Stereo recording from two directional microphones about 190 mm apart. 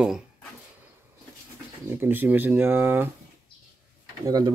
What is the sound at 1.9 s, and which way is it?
Speech, 10° right (ahead or behind).